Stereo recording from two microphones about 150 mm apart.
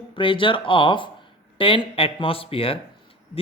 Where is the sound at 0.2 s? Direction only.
35° left (ahead or behind).